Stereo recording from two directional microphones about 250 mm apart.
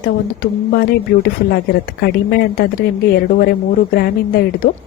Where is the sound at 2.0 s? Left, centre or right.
Left.